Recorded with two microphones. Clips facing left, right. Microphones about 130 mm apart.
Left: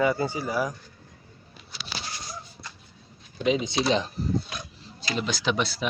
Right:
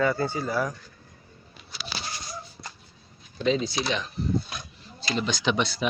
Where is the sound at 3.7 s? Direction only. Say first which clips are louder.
Left 4 dB; 30° left (ahead or behind).